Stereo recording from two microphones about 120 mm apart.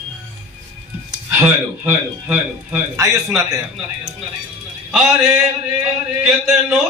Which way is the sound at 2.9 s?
25° right (ahead or behind).